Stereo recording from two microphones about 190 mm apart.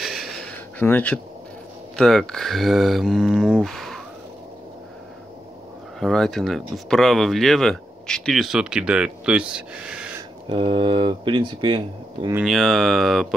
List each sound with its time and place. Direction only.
0.0 s a sound: centre (ahead or behind)
2.0 s speech: centre (ahead or behind)
5.9 s speech: centre (ahead or behind)
10.5 s speech: 25° right (ahead or behind)
12.4 s speech: centre (ahead or behind)